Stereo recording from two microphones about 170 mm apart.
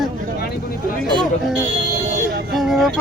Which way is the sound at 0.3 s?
65° left (ahead or behind).